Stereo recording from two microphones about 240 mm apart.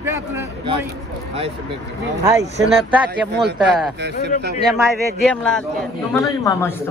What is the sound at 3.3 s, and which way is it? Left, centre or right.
Speech, right.